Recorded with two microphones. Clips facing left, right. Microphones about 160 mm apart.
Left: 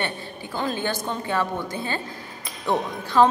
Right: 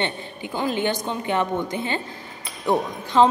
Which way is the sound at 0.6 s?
15° right (ahead or behind).